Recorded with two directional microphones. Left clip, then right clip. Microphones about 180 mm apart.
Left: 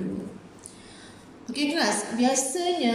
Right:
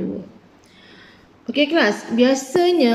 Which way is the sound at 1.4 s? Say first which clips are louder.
Right 8 dB; 45° right (ahead or behind).